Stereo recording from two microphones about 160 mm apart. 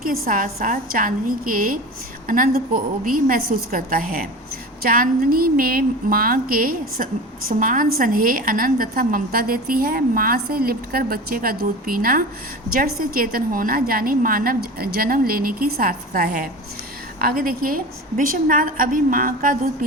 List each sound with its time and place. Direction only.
0.0 s a woman's voice: 60° right (ahead or behind)